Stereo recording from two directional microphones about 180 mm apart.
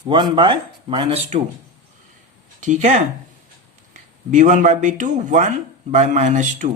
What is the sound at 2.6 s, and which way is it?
Speech, 45° right (ahead or behind).